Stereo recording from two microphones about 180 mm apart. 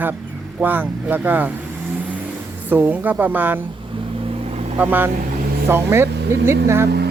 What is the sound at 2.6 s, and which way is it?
Speech, 10° right (ahead or behind).